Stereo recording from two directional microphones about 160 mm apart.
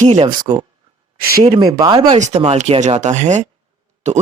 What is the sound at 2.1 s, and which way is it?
Speech, 45° right (ahead or behind).